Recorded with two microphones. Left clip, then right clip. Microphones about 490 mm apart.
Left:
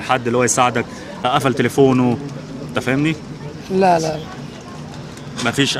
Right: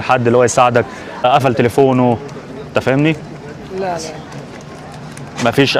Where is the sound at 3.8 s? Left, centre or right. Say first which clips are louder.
Left 7 dB; left.